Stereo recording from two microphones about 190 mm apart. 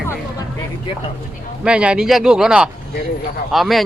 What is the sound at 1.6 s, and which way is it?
Speech, 5° right (ahead or behind).